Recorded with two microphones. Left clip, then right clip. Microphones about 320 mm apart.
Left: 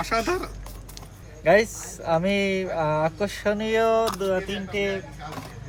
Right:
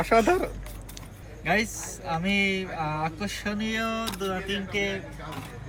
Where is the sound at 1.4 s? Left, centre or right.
Left.